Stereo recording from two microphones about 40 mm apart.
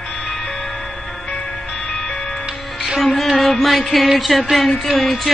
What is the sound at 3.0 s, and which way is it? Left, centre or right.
Music, centre.